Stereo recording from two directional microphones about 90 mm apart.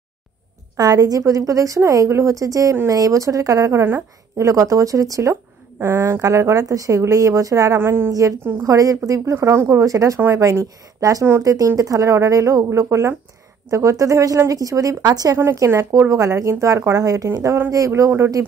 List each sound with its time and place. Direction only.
0.7 s speech: 45° right (ahead or behind); by 6.2 s 25° right (ahead or behind)
6.2 s speech: 35° right (ahead or behind)
8.1 s speech: 40° right (ahead or behind)
15.3 s speech: 35° right (ahead or behind)